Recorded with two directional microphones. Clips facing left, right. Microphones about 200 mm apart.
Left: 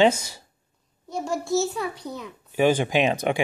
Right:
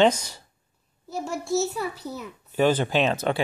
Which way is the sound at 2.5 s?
10° left (ahead or behind).